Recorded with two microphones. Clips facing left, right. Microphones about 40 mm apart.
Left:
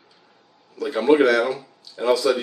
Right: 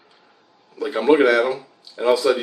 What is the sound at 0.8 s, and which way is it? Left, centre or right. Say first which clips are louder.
Speech: right 1 dB; centre.